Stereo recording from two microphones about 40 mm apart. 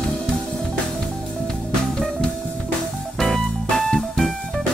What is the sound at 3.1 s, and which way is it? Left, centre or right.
Music, centre.